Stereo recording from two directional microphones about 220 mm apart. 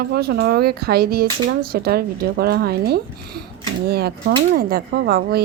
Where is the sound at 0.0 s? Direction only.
45° right (ahead or behind).